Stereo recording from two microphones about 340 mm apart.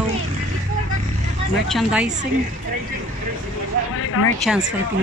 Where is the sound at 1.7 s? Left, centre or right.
Centre.